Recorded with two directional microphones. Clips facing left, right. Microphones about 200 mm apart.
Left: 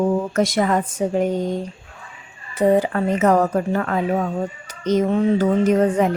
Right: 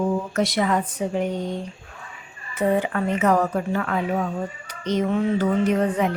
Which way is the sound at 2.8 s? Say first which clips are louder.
Left 4 dB; 40° left (ahead or behind).